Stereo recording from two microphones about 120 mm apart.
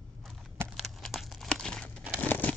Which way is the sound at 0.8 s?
Centre (ahead or behind).